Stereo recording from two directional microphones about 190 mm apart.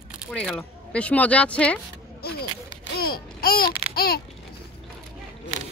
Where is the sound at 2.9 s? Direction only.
50° left (ahead or behind).